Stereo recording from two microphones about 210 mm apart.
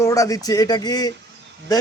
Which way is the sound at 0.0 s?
15° left (ahead or behind).